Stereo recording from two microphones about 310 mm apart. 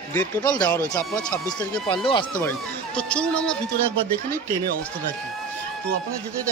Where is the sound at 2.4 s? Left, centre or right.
Centre.